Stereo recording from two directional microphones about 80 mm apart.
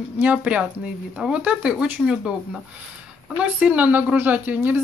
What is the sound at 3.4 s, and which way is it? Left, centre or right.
A woman's voice, centre.